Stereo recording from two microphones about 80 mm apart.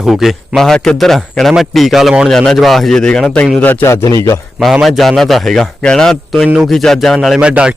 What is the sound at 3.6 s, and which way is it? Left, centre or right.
Speech, left.